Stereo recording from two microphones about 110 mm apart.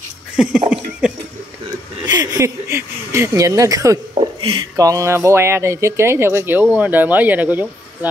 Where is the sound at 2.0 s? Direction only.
35° right (ahead or behind).